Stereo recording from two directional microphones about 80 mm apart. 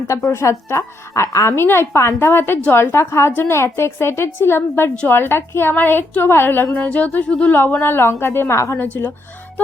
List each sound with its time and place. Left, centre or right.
0.1 s a woman's voice: left
8.8 s a woman's voice: left